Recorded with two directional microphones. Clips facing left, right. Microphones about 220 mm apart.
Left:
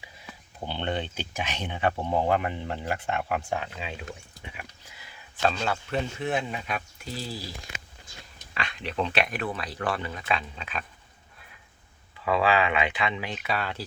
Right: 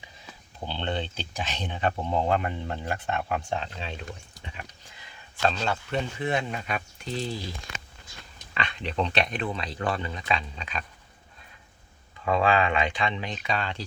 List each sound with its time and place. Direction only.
0.6 s speech: 15° left (ahead or behind)
5.4 s speech: 5° left (ahead or behind)
8.5 s speech: 5° left (ahead or behind)
9.3 s speech: 25° right (ahead or behind)
10.2 s speech: 5° left (ahead or behind)
12.3 s speech: 5° left (ahead or behind)